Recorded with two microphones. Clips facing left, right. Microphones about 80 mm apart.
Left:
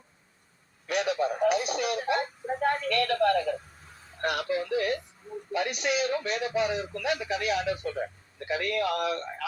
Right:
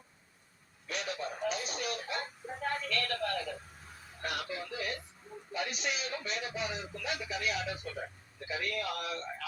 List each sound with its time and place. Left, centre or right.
0.9 s a sound: left
4.2 s radio: left
5.5 s a man's voice: left